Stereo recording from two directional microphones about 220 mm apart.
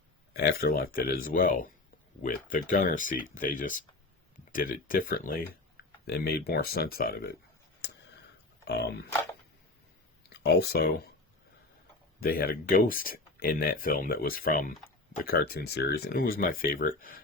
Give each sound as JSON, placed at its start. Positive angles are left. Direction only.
{"t": 0.3, "sound": "speech", "side_deg": 45}
{"t": 8.6, "sound": "speech", "side_deg": 50}
{"t": 10.2, "sound": "speech", "side_deg": 50}
{"t": 12.2, "sound": "speech", "side_deg": 40}